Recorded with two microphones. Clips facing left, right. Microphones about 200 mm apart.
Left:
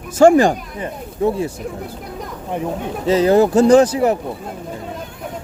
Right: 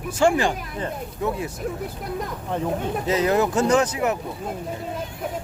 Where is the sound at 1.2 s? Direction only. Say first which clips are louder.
Left 8 dB; 30° left (ahead or behind).